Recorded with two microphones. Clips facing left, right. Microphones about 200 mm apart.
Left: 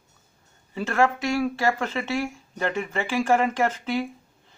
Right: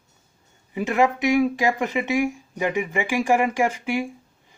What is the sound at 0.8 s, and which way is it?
Speech, 15° right (ahead or behind).